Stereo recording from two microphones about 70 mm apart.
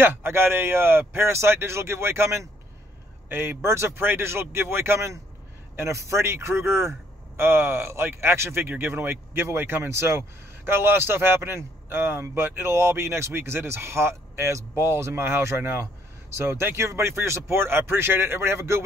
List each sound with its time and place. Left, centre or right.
0.0 s speech: right